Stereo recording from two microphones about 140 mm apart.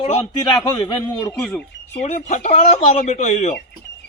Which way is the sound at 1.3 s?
5° left (ahead or behind).